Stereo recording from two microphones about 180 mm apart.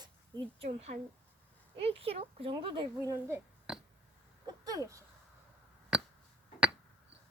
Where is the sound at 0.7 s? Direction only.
35° right (ahead or behind).